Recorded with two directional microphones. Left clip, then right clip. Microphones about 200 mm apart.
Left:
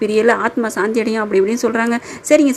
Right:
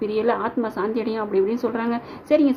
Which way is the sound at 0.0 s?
25° left (ahead or behind).